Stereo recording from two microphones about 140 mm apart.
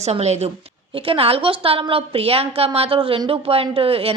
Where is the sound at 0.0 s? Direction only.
50° right (ahead or behind).